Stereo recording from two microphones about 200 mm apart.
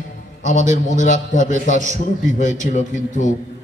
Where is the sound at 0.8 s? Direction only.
40° left (ahead or behind).